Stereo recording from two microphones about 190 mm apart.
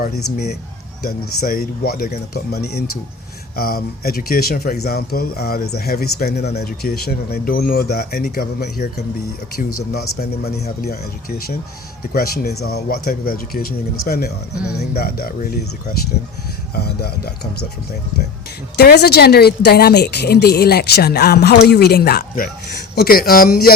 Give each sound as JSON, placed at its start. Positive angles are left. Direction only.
{"t": 0.0, "sound": "speech", "side_deg": 55}
{"t": 16.7, "sound": "speech", "side_deg": 55}
{"t": 18.8, "sound": "speech", "side_deg": 60}